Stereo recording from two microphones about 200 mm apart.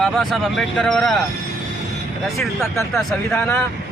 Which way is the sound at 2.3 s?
15° left (ahead or behind).